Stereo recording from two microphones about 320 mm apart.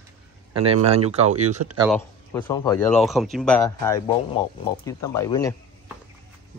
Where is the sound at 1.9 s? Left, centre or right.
Centre.